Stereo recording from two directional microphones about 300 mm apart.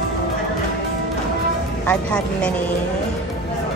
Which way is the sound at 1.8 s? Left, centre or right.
Centre.